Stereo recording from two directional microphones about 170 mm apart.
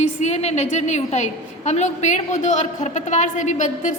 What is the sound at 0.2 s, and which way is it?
A woman's voice, 40° left (ahead or behind).